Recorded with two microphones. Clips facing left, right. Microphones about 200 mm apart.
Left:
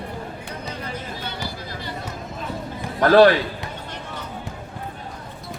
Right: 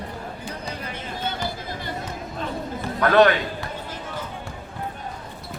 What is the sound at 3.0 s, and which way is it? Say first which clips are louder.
Speech: left 4 dB; 30° left (ahead or behind).